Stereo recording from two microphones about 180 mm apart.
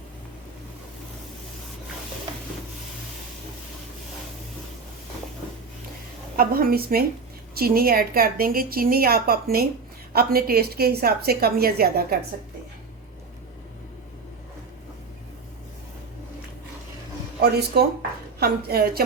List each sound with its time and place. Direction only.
6.3 s a woman's voice: 55° right (ahead or behind)
17.4 s a woman's voice: 65° right (ahead or behind)